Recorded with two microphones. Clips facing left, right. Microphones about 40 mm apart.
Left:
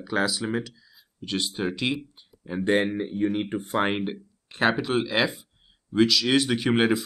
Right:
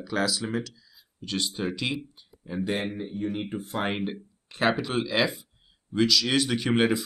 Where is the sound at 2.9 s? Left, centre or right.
Left.